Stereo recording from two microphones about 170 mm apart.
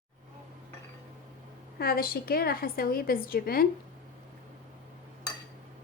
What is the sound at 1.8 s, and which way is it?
A woman's voice, 60° left (ahead or behind).